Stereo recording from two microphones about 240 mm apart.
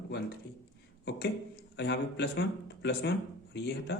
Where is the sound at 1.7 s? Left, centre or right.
Left.